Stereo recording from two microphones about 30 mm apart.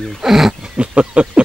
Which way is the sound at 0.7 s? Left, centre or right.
Right.